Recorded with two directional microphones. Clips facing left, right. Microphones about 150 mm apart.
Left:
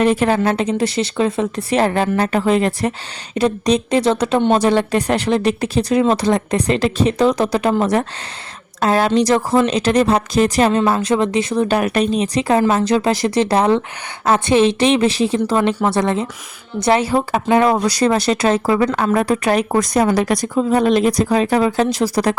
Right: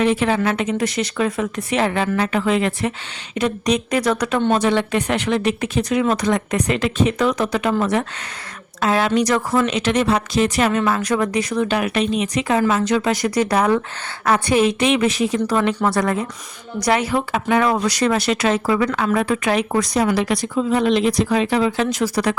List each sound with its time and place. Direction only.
0.0 s a woman's voice: 45° left (ahead or behind); by 4.5 s 25° left (ahead or behind)
4.5 s a woman's voice: 35° left (ahead or behind)